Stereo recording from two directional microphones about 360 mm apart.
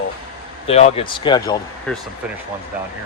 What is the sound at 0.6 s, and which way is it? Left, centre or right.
Speech, centre.